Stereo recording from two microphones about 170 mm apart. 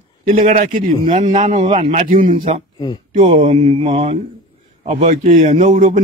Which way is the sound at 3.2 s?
35° right (ahead or behind).